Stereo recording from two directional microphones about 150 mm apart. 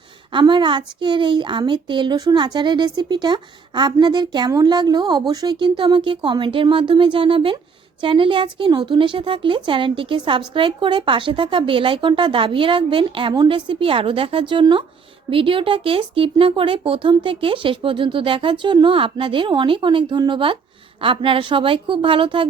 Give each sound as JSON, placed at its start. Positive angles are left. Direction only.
{"t": 0.3, "sound": "a woman's voice", "side_deg": -30}